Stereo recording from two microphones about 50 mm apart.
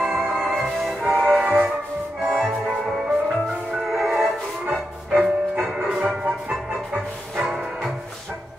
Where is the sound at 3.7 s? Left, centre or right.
Centre.